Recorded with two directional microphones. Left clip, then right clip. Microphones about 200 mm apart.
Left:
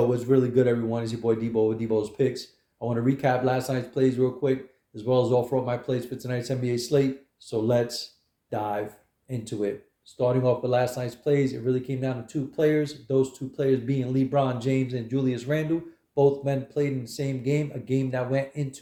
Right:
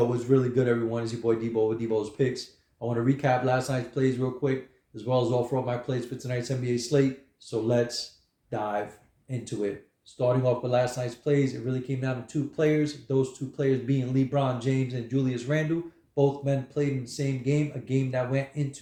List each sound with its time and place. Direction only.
0.1 s speech: 50° left (ahead or behind)